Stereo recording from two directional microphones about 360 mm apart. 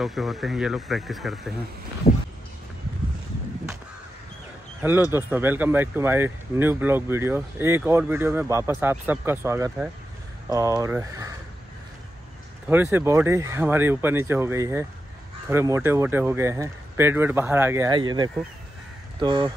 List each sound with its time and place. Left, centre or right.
0.0 s speech: centre
2.1 s a sound: centre
5.1 s speech: centre
12.6 s speech: centre